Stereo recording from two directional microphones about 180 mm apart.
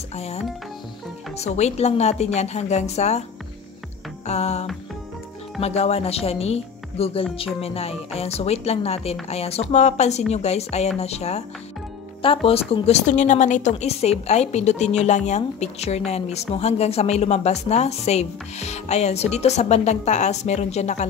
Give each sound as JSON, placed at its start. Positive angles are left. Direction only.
{"t": 0.1, "sound": "speech", "side_deg": 35}
{"t": 4.3, "sound": "speech", "side_deg": 35}
{"t": 12.4, "sound": "speech", "side_deg": 30}